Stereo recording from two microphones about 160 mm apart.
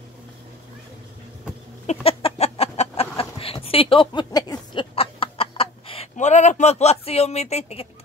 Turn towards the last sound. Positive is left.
turn(degrees=40)  # may be behind; listen again after turning